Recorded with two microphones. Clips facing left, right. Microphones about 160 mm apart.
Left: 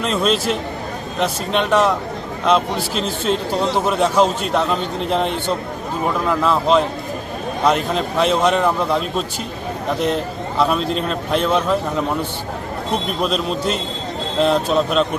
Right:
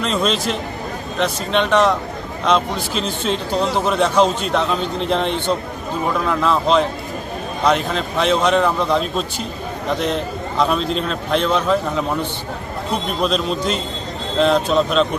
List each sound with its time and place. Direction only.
0.0 s a man's voice: 5° left (ahead or behind)
10.6 s a man's voice: 5° left (ahead or behind)
13.2 s a man's voice: 5° left (ahead or behind)